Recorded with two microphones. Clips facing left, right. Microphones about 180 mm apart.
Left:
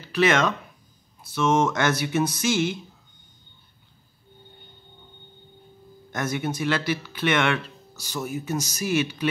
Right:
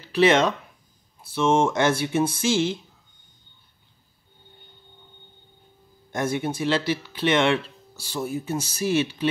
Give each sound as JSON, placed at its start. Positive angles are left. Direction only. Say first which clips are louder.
{"t": 0.0, "sound": "speech", "louder": "right 3 dB", "side_deg": -30}
{"t": 6.1, "sound": "speech", "louder": "right 2 dB", "side_deg": -30}